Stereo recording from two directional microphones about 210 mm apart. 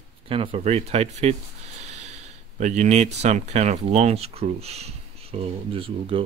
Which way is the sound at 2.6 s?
35° right (ahead or behind).